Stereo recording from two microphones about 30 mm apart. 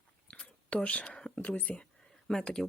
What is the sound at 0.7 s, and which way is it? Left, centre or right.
Speech, left.